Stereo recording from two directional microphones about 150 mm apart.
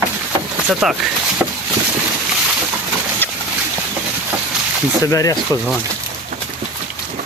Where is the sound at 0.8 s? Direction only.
Centre (ahead or behind).